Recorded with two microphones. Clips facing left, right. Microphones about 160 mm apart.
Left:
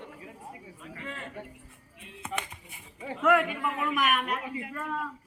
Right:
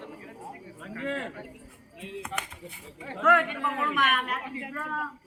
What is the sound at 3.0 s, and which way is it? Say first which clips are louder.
A man's voice: even; 10° left (ahead or behind).